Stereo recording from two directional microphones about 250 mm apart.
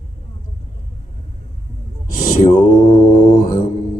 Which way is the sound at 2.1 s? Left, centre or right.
Left.